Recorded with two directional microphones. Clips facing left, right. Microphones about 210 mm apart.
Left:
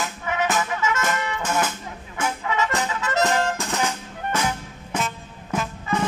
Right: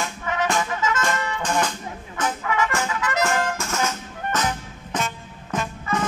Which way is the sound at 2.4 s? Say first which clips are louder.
Even; 20° left (ahead or behind).